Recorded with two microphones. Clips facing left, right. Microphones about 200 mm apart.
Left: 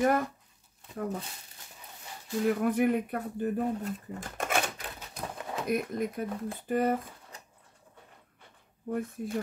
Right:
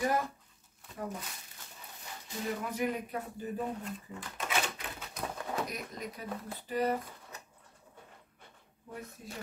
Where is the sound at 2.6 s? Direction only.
55° left (ahead or behind).